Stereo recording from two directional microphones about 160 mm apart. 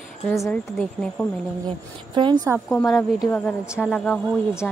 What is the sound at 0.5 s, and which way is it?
Speech, 5° left (ahead or behind).